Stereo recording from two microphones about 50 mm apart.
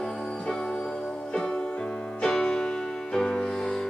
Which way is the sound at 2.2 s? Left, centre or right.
Centre.